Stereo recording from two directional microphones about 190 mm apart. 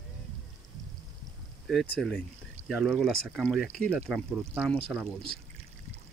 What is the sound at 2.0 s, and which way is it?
Speech, 5° left (ahead or behind).